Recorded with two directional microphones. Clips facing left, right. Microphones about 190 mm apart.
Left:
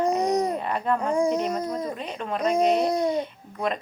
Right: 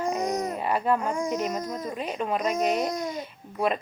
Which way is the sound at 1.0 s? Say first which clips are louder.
Left 4 dB; 30° left (ahead or behind).